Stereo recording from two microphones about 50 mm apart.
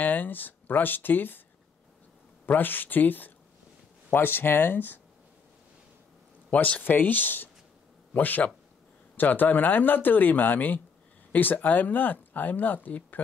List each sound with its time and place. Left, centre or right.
0.0 s speech: left
2.4 s speech: left
6.5 s a man's voice: left